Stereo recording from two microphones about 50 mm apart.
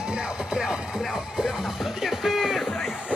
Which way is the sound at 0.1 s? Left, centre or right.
Centre.